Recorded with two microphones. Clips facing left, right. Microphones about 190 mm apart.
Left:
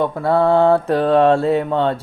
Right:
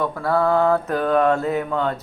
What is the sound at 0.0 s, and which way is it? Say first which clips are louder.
Mantra: left 4 dB; 25° left (ahead or behind).